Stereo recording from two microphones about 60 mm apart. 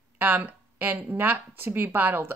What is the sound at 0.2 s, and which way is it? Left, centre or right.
Speech, right.